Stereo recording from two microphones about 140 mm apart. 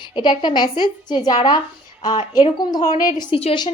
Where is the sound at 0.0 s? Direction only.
35° left (ahead or behind).